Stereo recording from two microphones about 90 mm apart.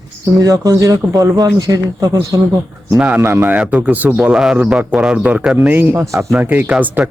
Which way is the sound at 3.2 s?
25° right (ahead or behind).